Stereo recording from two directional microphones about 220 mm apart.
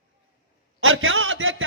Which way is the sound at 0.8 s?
65° right (ahead or behind).